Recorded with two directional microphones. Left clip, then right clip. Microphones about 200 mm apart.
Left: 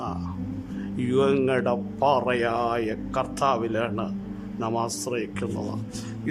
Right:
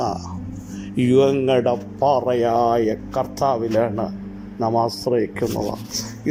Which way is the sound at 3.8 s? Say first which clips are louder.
Right 7 dB; 10° left (ahead or behind).